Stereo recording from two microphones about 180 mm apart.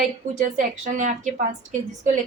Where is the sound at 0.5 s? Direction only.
45° right (ahead or behind).